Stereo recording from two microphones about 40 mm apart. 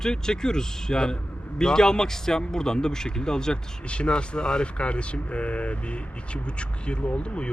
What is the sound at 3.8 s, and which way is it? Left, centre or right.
Speech, left.